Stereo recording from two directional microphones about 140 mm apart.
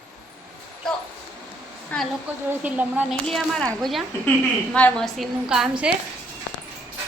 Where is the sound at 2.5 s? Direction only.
10° right (ahead or behind).